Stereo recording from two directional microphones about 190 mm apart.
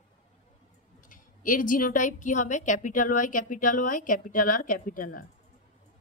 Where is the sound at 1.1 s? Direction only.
45° left (ahead or behind).